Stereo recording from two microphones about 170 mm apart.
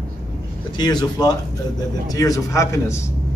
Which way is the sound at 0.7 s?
25° left (ahead or behind).